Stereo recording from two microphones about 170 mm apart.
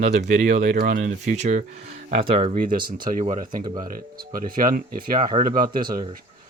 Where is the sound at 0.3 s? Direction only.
75° right (ahead or behind); by 1.6 s 50° right (ahead or behind).